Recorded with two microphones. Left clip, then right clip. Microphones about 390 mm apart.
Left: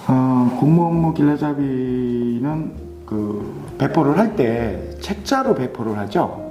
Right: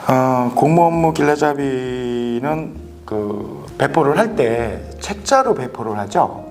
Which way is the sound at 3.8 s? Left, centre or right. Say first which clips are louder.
Right 3 dB; right.